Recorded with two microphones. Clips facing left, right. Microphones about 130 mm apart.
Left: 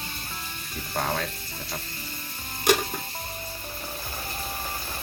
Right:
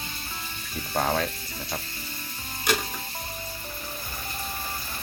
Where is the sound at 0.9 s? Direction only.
5° right (ahead or behind).